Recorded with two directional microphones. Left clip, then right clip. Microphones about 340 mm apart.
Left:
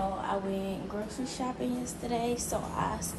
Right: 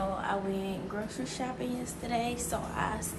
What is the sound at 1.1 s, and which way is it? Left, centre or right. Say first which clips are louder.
A woman's voice: left 1 dB; centre.